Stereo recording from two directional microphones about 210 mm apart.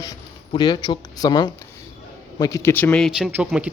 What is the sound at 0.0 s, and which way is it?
Speech, 20° left (ahead or behind).